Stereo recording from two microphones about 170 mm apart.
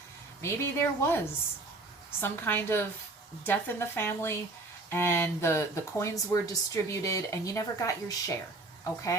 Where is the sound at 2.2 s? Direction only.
15° left (ahead or behind).